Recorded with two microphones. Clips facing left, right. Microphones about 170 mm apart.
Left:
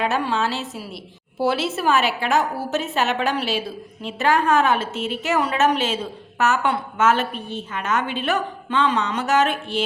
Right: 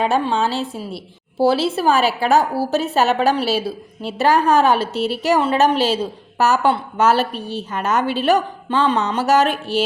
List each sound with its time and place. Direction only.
0.0 s a woman's voice: 30° right (ahead or behind)